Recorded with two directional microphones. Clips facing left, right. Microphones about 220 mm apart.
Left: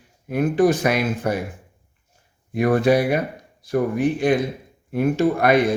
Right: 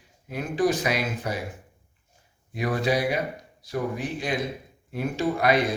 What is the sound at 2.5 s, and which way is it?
A man's voice, 55° left (ahead or behind).